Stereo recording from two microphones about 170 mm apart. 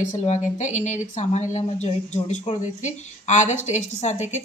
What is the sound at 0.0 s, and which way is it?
Speech, 45° left (ahead or behind).